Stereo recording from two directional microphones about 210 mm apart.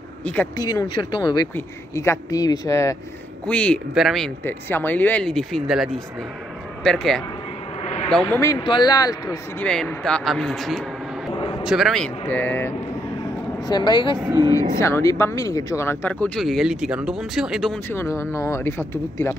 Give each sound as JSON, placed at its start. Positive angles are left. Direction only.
{"t": 0.2, "sound": "speech", "side_deg": 15}
{"t": 7.8, "sound": "a sound", "side_deg": 30}
{"t": 8.1, "sound": "speech", "side_deg": 5}
{"t": 9.7, "sound": "speech", "side_deg": 5}
{"t": 11.3, "sound": "a sound", "side_deg": 20}
{"t": 11.6, "sound": "speech", "side_deg": 0}
{"t": 13.7, "sound": "speech", "side_deg": 20}
{"t": 14.2, "sound": "speech", "side_deg": -15}
{"t": 14.8, "sound": "speech", "side_deg": 15}
{"t": 17.9, "sound": "speech", "side_deg": 15}